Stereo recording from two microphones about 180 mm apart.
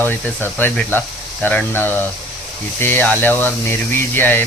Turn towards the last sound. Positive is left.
turn(degrees=10)  # may be behind; listen again after turning